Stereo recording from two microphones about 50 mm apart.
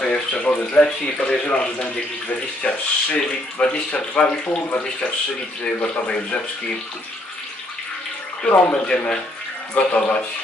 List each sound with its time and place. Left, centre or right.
0.0 s speech: centre
8.7 s speech: left